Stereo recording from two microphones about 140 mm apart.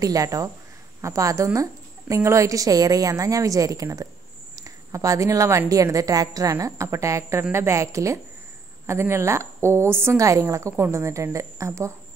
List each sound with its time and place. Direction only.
0.0 s a woman's voice: 25° right (ahead or behind)